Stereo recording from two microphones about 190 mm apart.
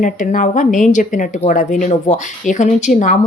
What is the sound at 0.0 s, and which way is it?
Speech, 45° left (ahead or behind).